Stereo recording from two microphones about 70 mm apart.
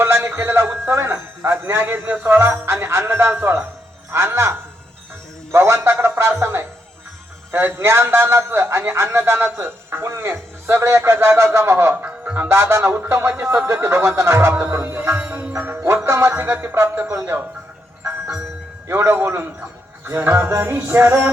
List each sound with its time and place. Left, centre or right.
0.0 s music: right
3.4 s a man's voice: right
4.1 s music: right
7.5 s a man's voice: right
15.1 s music: right
16.0 s a man's voice: right
18.9 s a man's voice: right